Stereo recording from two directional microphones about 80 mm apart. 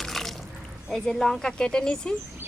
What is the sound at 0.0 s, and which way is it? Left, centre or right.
Water, centre.